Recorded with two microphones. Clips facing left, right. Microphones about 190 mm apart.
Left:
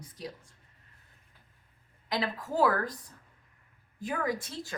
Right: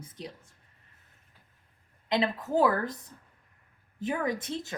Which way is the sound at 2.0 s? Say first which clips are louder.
Right 5 dB; 25° right (ahead or behind).